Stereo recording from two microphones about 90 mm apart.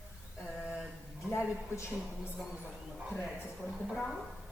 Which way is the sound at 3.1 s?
5° left (ahead or behind).